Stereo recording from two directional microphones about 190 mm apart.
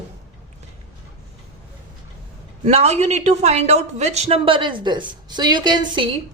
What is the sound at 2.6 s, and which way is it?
A woman's voice, 35° right (ahead or behind).